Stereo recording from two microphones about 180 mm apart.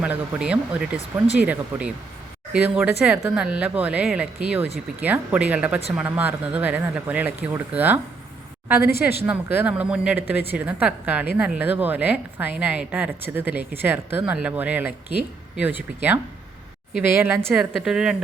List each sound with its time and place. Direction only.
0.0 s speech: 5° right (ahead or behind)
8.8 s speech: 60° left (ahead or behind)
9.2 s speech: 10° right (ahead or behind)
10.2 s a woman's voice: 65° left (ahead or behind)
10.5 s speech: 10° right (ahead or behind)